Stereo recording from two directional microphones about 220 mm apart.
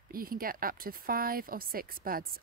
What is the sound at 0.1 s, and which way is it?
Speech, 40° right (ahead or behind).